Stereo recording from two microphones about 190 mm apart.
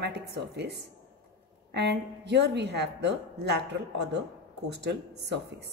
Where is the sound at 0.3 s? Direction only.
60° right (ahead or behind).